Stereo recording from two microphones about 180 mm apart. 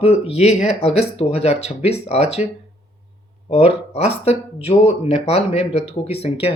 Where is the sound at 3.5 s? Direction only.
35° left (ahead or behind).